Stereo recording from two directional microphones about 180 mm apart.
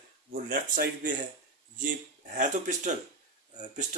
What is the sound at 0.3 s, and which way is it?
Speech, 50° right (ahead or behind).